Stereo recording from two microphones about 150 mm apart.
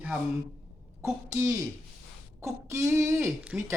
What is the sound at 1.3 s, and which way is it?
Speech, 20° right (ahead or behind).